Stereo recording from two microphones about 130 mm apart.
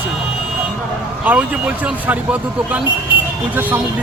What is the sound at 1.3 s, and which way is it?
Speech, 10° right (ahead or behind).